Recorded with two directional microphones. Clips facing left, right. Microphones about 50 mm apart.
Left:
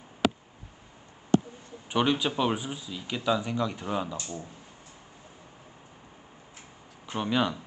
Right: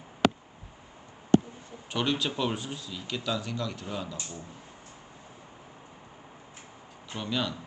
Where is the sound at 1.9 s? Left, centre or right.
Centre.